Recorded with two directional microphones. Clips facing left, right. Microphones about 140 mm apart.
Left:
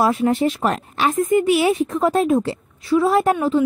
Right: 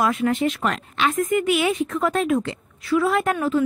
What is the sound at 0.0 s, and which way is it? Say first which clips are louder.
Speech: left 3 dB; 30° left (ahead or behind).